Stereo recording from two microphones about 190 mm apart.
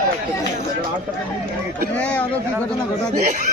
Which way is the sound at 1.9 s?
5° left (ahead or behind).